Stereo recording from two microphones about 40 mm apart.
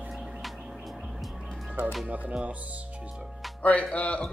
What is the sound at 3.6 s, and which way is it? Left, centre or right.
Speech, left.